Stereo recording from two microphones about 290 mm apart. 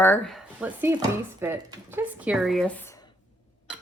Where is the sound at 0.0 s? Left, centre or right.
Centre.